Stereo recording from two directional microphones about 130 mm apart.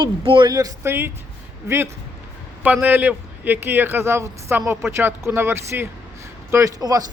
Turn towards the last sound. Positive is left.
turn(degrees=-30)  # may be behind; listen again after turning